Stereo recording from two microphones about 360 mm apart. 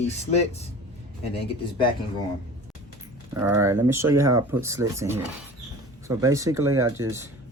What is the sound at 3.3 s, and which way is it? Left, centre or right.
Speech, centre.